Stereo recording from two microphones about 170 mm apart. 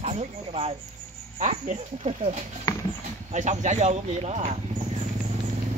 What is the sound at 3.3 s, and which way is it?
Speech, 45° right (ahead or behind).